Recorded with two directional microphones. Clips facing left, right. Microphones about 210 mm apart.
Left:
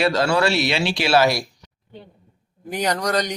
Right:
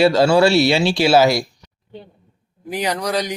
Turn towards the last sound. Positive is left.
turn(degrees=-5)  # may be behind; listen again after turning